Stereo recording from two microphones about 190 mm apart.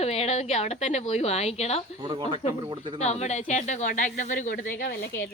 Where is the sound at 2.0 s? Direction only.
25° right (ahead or behind).